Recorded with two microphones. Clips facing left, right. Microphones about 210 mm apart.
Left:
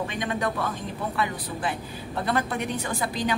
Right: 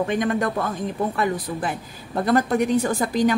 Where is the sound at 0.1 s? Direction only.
50° right (ahead or behind).